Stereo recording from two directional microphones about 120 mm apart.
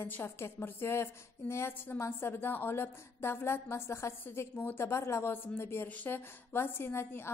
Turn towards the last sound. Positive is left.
turn(degrees=20)  # may be behind; listen again after turning